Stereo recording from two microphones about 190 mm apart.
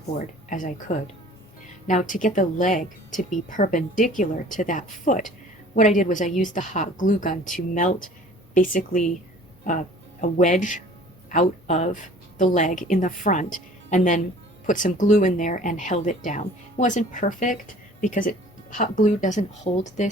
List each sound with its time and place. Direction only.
0.2 s speech: 45° left (ahead or behind)